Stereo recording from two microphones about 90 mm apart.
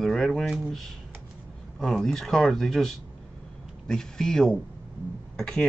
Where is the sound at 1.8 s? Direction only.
5° left (ahead or behind).